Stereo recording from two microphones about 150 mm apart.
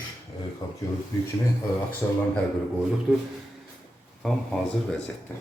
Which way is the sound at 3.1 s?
10° right (ahead or behind).